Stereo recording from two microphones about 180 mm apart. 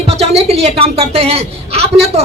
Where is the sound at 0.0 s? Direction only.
35° right (ahead or behind).